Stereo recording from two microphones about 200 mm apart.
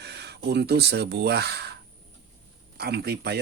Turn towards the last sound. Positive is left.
turn(degrees=-55)  # may be behind; listen again after turning